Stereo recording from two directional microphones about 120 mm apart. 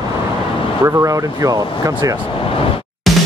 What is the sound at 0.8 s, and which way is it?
Speech, 25° right (ahead or behind).